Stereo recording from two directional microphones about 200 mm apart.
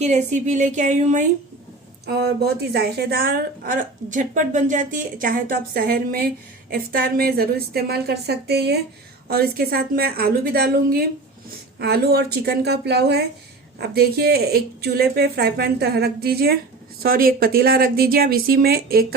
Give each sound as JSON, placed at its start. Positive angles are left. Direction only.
{"t": 0.0, "sound": "a woman's voice", "side_deg": -35}
{"t": 2.0, "sound": "a woman's voice", "side_deg": -55}